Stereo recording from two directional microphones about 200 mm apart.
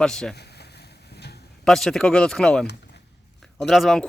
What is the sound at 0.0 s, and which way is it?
Speech, 5° left (ahead or behind).